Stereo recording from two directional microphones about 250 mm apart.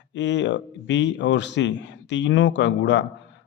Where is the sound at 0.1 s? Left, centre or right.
Left.